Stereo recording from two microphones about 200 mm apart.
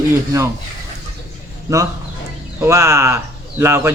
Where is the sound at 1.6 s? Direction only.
15° right (ahead or behind).